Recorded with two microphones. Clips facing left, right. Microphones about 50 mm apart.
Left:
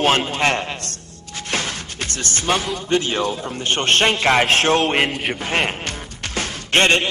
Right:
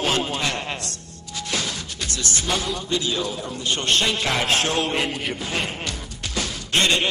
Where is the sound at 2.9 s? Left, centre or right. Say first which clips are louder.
Left 6 dB; left.